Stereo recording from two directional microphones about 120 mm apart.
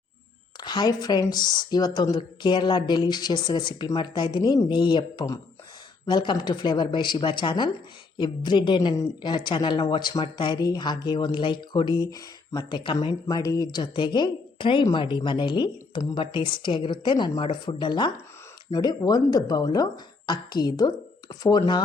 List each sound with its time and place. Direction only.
0.6 s speech: 35° left (ahead or behind)
13.2 s speech: 30° left (ahead or behind)